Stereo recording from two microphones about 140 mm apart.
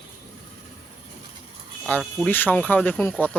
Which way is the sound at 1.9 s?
10° left (ahead or behind).